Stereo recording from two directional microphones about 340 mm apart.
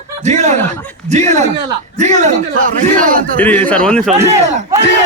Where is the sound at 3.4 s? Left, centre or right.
Centre.